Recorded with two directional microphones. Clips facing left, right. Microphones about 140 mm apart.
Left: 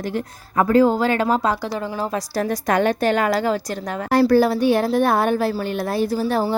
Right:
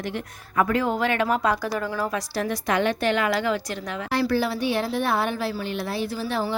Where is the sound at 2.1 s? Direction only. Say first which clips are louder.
Left 4 dB; 40° left (ahead or behind).